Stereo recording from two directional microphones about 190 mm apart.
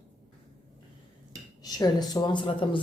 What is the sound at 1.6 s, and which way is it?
Speech, 20° left (ahead or behind).